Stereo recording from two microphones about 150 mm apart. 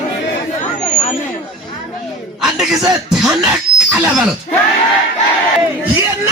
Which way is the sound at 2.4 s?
5° right (ahead or behind).